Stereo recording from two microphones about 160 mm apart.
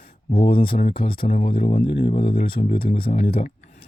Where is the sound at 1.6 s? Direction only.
50° left (ahead or behind).